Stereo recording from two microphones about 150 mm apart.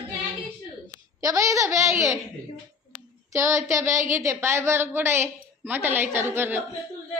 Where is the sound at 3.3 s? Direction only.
20° right (ahead or behind).